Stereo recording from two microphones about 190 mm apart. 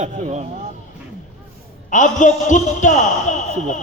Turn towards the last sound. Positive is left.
turn(degrees=40)  # may be behind; listen again after turning